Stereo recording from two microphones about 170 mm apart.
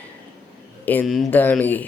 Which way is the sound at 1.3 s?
10° left (ahead or behind).